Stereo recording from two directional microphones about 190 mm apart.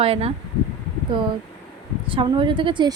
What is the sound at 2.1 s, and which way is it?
Speech, 25° right (ahead or behind).